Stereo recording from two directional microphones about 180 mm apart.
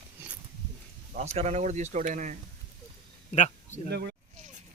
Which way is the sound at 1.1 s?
35° right (ahead or behind).